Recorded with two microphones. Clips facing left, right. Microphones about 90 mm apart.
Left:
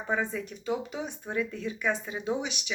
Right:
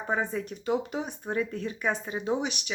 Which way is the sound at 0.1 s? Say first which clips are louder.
Right 1 dB; 40° right (ahead or behind).